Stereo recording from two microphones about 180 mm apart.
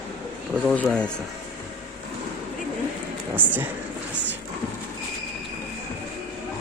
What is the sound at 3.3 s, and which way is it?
Speech, 10° right (ahead or behind).